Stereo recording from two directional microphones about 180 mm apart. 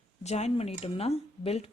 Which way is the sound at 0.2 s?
35° left (ahead or behind).